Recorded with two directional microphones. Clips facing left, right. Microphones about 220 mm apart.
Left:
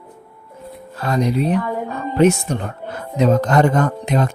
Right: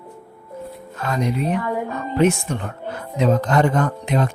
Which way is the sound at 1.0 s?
35° left (ahead or behind).